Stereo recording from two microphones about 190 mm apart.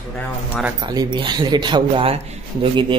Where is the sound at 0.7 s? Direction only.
20° right (ahead or behind).